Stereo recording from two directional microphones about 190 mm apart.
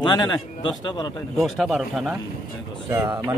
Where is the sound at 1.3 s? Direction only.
Centre (ahead or behind).